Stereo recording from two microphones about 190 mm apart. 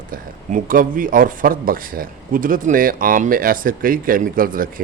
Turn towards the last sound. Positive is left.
turn(degrees=-50)  # may be behind; listen again after turning